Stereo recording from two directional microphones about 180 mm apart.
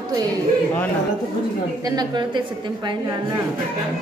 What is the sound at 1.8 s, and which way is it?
Speech, 25° right (ahead or behind).